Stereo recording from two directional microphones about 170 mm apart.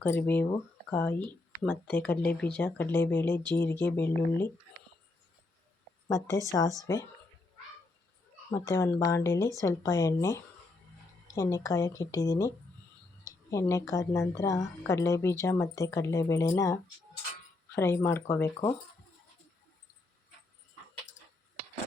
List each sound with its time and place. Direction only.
0.0 s a woman's voice: 10° left (ahead or behind)
6.1 s a woman's voice: 15° left (ahead or behind)
8.4 s a woman's voice: 20° left (ahead or behind)